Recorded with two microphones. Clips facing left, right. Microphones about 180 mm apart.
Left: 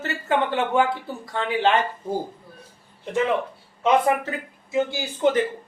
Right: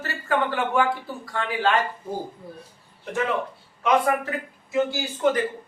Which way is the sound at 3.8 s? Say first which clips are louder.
Left 2 dB; 25° left (ahead or behind).